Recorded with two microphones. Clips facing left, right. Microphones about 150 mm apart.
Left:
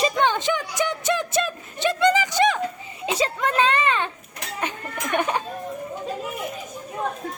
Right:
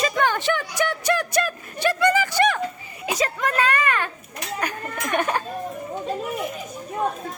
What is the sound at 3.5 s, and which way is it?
Speech, 25° left (ahead or behind).